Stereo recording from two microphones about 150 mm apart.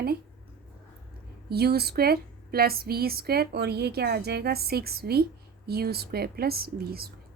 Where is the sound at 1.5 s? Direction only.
90° right.